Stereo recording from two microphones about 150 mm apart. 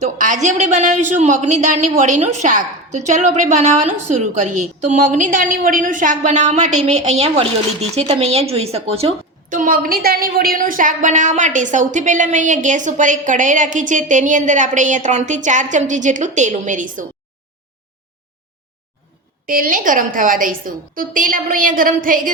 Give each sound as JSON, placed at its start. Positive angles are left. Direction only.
{"t": 0.0, "sound": "a woman's voice", "side_deg": -55}
{"t": 9.5, "sound": "a woman's voice", "side_deg": -65}
{"t": 19.5, "sound": "a woman's voice", "side_deg": -70}